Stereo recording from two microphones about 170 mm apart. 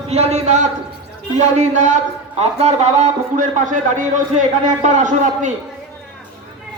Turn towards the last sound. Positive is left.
turn(degrees=-45)  # may be behind; listen again after turning